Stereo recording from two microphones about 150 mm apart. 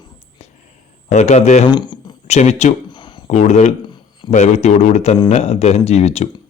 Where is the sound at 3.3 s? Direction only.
50° left (ahead or behind).